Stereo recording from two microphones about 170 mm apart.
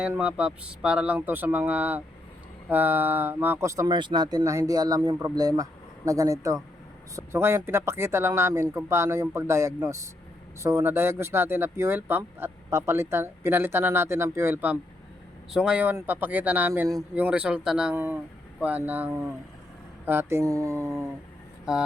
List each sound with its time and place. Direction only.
0.0 s speech: 5° right (ahead or behind)